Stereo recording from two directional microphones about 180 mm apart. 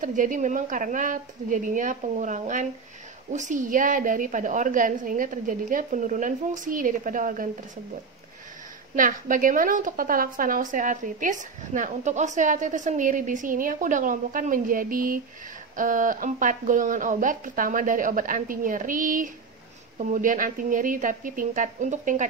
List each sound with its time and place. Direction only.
0.0 s a woman's voice: 45° right (ahead or behind)
8.9 s a woman's voice: 50° right (ahead or behind)